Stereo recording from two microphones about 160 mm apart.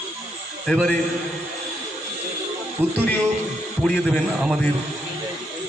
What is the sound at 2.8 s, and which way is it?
Speech, 15° right (ahead or behind).